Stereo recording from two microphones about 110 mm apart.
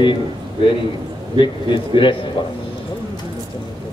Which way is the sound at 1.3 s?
45° left (ahead or behind).